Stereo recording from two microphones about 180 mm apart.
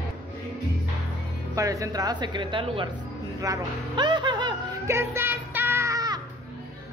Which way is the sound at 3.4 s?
20° right (ahead or behind).